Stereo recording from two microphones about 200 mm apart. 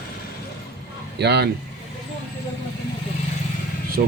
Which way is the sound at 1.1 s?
55° right (ahead or behind).